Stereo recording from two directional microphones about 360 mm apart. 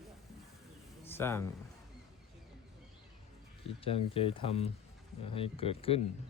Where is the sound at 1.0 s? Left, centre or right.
Centre.